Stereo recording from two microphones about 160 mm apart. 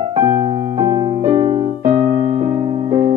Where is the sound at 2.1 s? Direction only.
35° right (ahead or behind).